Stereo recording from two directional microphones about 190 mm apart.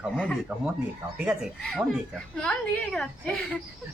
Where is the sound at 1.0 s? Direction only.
15° right (ahead or behind).